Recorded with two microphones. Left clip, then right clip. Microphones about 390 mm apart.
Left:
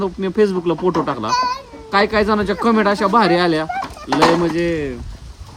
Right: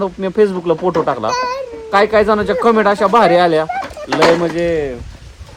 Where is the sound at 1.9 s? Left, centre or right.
Centre.